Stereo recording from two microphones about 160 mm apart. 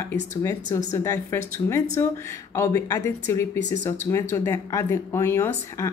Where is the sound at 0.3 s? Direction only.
20° left (ahead or behind).